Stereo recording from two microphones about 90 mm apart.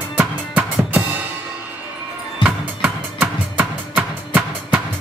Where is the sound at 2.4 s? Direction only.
10° right (ahead or behind).